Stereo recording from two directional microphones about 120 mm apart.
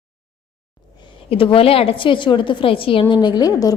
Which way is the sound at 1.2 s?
50° left (ahead or behind).